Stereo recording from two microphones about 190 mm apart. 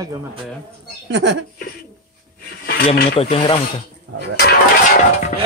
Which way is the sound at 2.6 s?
50° left (ahead or behind).